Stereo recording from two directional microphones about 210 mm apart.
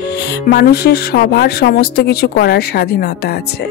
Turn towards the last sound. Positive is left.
turn(degrees=50)  # may be behind; listen again after turning